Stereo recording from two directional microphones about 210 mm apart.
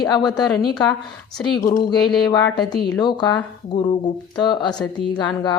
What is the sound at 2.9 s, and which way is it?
A woman's voice, 20° left (ahead or behind).